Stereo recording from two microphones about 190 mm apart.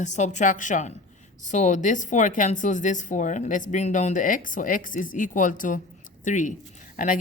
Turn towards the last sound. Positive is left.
turn(degrees=45)  # may be behind; listen again after turning